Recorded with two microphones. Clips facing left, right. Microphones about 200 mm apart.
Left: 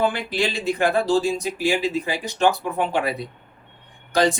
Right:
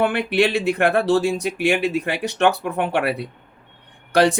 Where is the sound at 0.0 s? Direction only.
65° right (ahead or behind).